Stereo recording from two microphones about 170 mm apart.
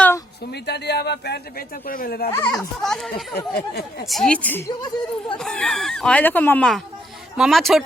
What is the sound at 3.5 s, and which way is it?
Speech, 70° left (ahead or behind).